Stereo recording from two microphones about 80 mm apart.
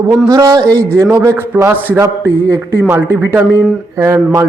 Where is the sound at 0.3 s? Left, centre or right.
Right.